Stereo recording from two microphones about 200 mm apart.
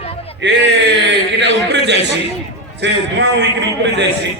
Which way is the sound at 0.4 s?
60° right (ahead or behind).